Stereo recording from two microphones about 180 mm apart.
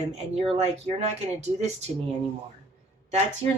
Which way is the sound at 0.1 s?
35° right (ahead or behind).